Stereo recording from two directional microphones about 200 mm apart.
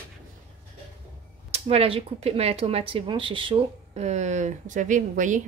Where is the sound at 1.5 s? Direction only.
30° right (ahead or behind).